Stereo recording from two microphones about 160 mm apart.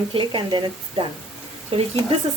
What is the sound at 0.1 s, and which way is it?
Speech, 30° right (ahead or behind).